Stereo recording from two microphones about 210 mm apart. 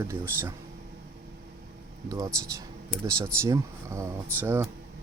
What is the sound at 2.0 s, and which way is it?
Speech, 15° right (ahead or behind).